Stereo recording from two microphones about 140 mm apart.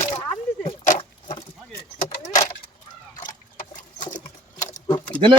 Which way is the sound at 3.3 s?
70° left (ahead or behind).